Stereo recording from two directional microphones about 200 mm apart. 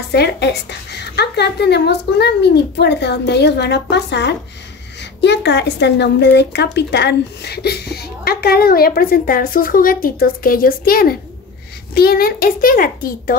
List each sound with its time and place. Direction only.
0.1 s a woman's voice: 55° left (ahead or behind)